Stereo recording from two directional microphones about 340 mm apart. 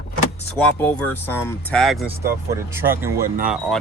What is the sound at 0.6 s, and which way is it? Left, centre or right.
Speech, centre.